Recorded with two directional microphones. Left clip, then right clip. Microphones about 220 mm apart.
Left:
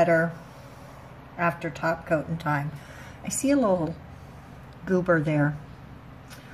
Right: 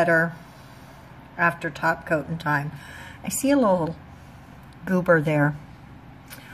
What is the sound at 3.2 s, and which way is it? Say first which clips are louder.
A woman's voice: right 3 dB; 25° right (ahead or behind).